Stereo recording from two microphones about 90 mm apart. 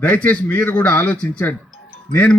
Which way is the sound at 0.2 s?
20° left (ahead or behind).